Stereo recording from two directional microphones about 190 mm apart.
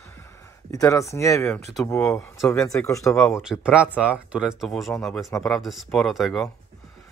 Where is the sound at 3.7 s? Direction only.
5° right (ahead or behind).